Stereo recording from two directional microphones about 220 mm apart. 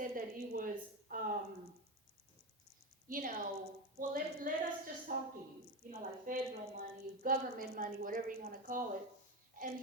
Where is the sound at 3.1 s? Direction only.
40° right (ahead or behind).